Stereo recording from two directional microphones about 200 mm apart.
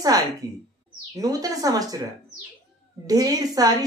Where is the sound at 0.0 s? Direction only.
20° right (ahead or behind).